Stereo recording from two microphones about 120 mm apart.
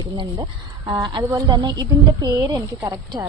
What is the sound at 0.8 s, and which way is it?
Speech, 40° right (ahead or behind).